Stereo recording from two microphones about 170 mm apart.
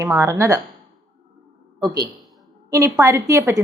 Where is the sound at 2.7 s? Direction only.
15° right (ahead or behind).